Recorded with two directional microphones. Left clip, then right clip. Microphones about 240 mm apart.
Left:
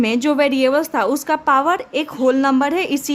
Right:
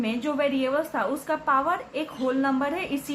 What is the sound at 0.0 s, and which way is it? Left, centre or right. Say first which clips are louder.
A woman's voice: left 9 dB; left.